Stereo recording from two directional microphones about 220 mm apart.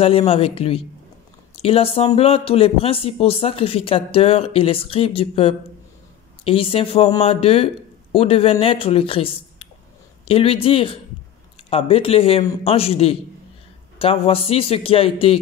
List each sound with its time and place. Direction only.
0.0 s speech: 25° left (ahead or behind)